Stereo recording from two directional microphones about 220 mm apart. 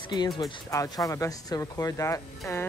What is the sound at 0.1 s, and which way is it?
Speech, 15° left (ahead or behind).